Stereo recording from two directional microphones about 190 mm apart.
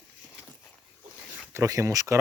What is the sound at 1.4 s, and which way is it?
Speech, 15° right (ahead or behind).